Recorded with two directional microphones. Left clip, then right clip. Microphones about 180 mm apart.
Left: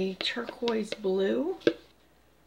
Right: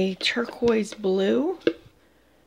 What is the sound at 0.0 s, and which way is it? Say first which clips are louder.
Speech: right 7 dB; 55° right (ahead or behind).